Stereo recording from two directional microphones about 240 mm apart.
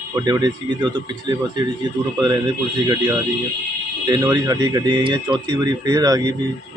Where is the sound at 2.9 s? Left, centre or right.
Centre.